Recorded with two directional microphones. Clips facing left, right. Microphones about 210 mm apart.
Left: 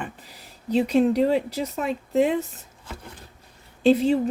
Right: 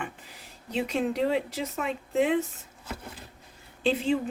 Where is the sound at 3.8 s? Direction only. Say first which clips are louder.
Left 7 dB; 40° left (ahead or behind).